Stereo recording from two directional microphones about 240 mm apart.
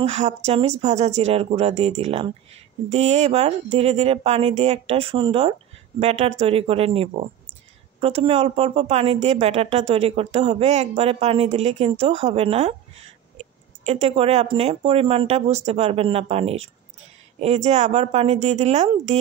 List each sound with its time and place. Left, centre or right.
0.0 s a woman's voice: right